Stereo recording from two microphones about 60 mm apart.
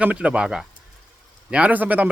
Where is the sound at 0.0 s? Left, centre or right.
Centre.